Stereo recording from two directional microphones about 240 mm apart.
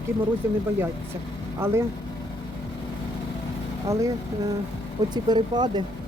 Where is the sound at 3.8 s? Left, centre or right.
Centre.